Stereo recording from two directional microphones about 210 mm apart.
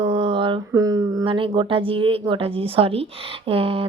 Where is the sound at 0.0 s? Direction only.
25° right (ahead or behind).